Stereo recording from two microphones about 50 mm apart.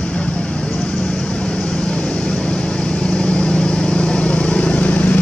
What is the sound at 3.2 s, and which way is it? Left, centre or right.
Vehicle, centre.